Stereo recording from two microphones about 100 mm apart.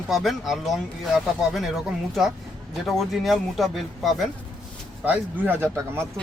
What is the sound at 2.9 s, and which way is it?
Speech, centre (ahead or behind).